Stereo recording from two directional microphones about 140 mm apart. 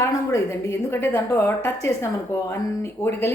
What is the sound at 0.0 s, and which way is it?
A woman's voice, 20° left (ahead or behind).